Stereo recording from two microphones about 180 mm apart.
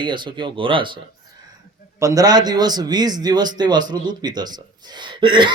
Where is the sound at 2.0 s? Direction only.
20° right (ahead or behind).